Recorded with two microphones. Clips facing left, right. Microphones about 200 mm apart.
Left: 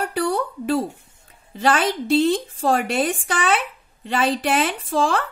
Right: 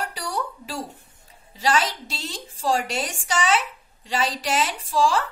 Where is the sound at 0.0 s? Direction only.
55° left (ahead or behind).